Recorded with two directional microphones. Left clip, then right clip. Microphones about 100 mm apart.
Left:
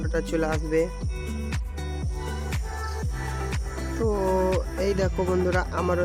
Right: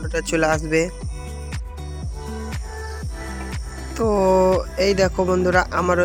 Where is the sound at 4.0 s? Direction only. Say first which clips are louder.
Right 8 dB; 45° right (ahead or behind).